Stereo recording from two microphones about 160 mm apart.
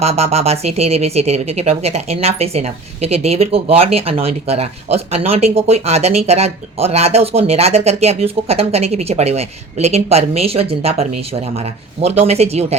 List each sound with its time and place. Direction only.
0.0 s speech: 40° right (ahead or behind)